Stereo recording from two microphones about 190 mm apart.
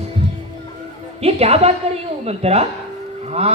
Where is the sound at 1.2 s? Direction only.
35° right (ahead or behind).